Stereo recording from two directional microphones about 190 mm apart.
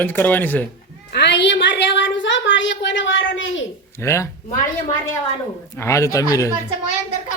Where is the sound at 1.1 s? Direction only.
65° left (ahead or behind); by 3.6 s 90° left.